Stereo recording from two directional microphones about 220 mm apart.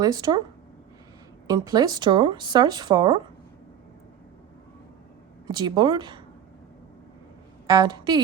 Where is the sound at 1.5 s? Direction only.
15° right (ahead or behind).